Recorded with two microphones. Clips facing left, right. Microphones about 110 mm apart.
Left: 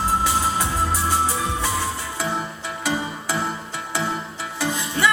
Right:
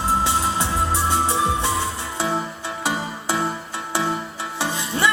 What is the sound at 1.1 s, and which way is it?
Music, 25° right (ahead or behind).